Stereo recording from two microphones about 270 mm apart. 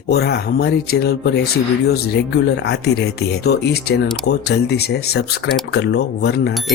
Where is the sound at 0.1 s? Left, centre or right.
Left.